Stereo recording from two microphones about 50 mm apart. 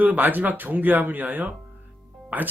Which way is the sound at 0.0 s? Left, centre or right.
Right.